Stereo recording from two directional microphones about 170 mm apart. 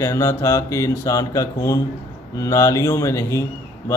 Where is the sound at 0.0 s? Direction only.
15° left (ahead or behind).